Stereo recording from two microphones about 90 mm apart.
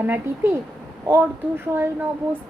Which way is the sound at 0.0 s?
25° right (ahead or behind).